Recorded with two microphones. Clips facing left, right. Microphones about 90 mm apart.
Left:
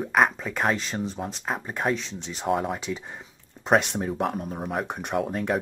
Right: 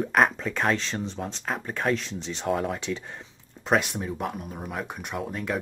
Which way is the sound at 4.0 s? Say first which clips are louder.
Left 4 dB; 40° left (ahead or behind).